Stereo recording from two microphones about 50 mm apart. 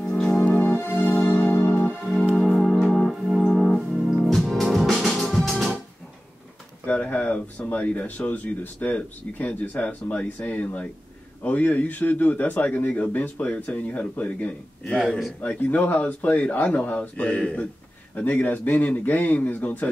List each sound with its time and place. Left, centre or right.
0.0 s music: centre
0.5 s music: left
2.1 s music: left
2.4 s organ: centre
5.2 s music: centre
7.1 s speech: left
8.3 s a man's voice: left
14.9 s speech: centre
15.4 s speech: left
18.1 s a man's voice: left